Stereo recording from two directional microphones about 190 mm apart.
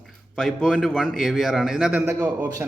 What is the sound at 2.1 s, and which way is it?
Speech, 15° right (ahead or behind).